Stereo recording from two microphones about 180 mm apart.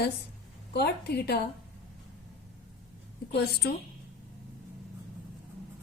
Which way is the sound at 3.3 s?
65° left (ahead or behind).